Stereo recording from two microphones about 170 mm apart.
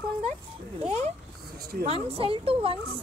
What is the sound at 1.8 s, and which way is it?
Speech, 35° right (ahead or behind).